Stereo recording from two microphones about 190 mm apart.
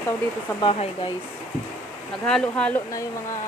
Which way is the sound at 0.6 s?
30° left (ahead or behind).